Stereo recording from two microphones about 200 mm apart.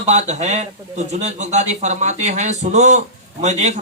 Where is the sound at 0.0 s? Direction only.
35° right (ahead or behind).